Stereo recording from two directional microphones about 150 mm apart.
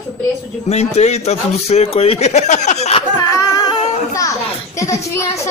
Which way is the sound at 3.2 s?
25° left (ahead or behind).